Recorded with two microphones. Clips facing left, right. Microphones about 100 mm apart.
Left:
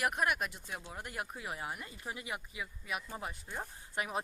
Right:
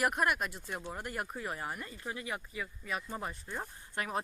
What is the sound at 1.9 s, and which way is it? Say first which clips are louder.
Speech: right 2 dB; 15° left (ahead or behind).